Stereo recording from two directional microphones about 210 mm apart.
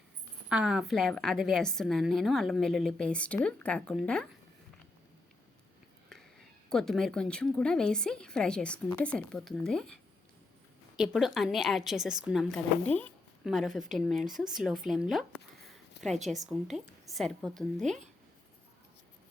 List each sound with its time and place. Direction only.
0.4 s a woman's voice: 5° right (ahead or behind)
6.7 s a woman's voice: centre (ahead or behind)
16.0 s a sound: 55° left (ahead or behind)
16.5 s a woman's voice: centre (ahead or behind)